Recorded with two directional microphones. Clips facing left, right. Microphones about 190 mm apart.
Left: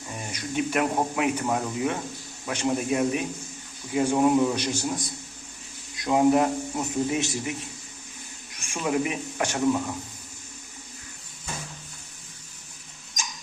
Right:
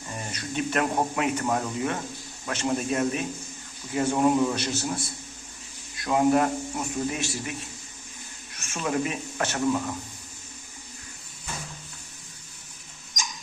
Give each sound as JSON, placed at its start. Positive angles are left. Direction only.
{"t": 0.3, "sound": "a man's voice", "side_deg": 10}
{"t": 8.5, "sound": "speech", "side_deg": 15}